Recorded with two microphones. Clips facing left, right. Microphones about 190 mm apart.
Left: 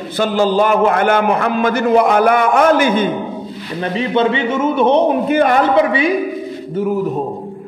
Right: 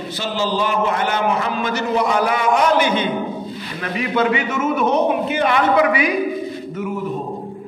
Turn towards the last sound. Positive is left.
turn(degrees=25)  # may be behind; listen again after turning